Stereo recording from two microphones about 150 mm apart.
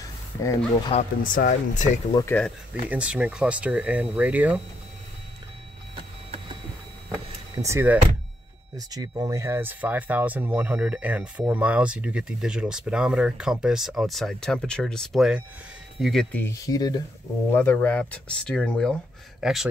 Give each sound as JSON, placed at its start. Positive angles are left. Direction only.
{"t": 0.0, "sound": "a sound", "side_deg": 20}
{"t": 0.9, "sound": "speech", "side_deg": 45}
{"t": 1.2, "sound": "speech", "side_deg": 65}
{"t": 2.1, "sound": "speech", "side_deg": 30}
{"t": 2.9, "sound": "speech", "side_deg": -10}
{"t": 7.6, "sound": "speech", "side_deg": -15}
{"t": 8.7, "sound": "speech", "side_deg": -25}
{"t": 16.6, "sound": "speech", "side_deg": 25}
{"t": 17.5, "sound": "speech", "side_deg": 15}